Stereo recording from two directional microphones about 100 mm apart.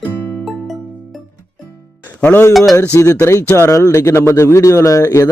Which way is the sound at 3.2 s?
30° left (ahead or behind).